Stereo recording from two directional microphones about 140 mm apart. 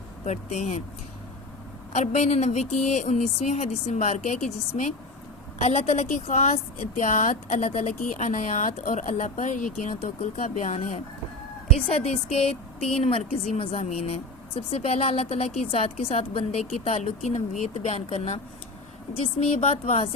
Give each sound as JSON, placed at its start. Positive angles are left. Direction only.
{"t": 0.3, "sound": "a woman's voice", "side_deg": 55}
{"t": 1.9, "sound": "a woman's voice", "side_deg": 55}
{"t": 9.8, "sound": "a woman's voice", "side_deg": 55}
{"t": 11.9, "sound": "a woman's voice", "side_deg": 45}
{"t": 19.6, "sound": "a woman's voice", "side_deg": 50}